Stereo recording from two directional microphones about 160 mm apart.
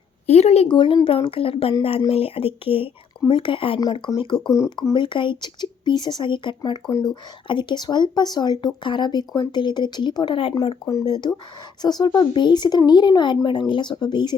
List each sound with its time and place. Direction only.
0.3 s a woman's voice: 40° left (ahead or behind)
10.8 s speech: 25° left (ahead or behind)